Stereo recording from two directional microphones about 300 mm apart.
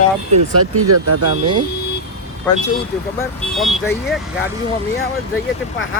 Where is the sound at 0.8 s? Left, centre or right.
Right.